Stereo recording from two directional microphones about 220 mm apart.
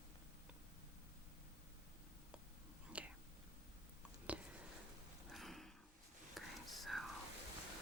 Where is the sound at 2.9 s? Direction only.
5° right (ahead or behind).